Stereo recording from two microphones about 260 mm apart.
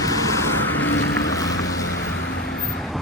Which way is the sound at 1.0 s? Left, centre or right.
Left.